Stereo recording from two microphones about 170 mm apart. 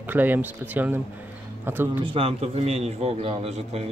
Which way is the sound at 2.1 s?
35° right (ahead or behind).